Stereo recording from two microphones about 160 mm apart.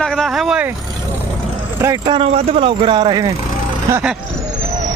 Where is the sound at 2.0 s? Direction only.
35° right (ahead or behind).